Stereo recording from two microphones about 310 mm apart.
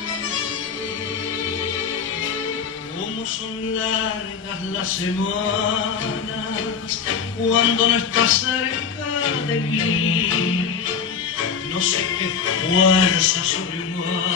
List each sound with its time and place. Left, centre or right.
7.4 s music: left
11.7 s music: left